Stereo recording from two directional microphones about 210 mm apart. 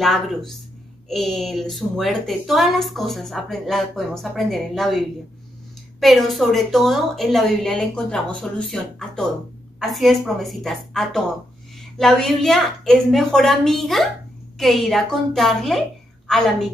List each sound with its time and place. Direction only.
0.0 s a woman's voice: centre (ahead or behind)